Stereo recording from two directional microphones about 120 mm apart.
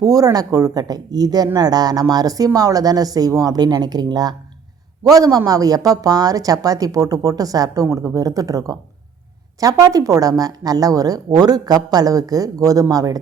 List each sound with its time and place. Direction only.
0.0 s a woman's voice: 30° right (ahead or behind)
9.8 s a woman's voice: 30° right (ahead or behind)